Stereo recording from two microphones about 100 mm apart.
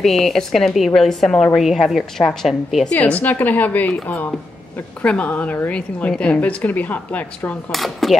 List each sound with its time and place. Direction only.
0.0 s a woman's voice: centre (ahead or behind)
2.9 s a woman's voice: 15° left (ahead or behind)
7.7 s a woman's voice: centre (ahead or behind)